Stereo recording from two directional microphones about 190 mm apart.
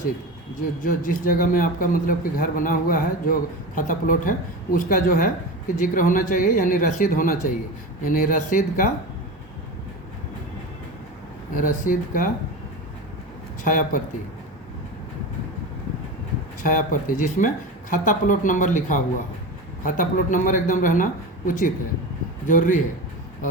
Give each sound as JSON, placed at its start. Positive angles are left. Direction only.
{"t": 0.8, "sound": "a man's voice", "side_deg": 45}
{"t": 11.5, "sound": "a man's voice", "side_deg": 45}
{"t": 13.7, "sound": "a man's voice", "side_deg": 45}
{"t": 16.6, "sound": "a man's voice", "side_deg": 45}